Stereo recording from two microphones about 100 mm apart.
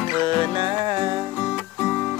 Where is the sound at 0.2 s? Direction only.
50° right (ahead or behind).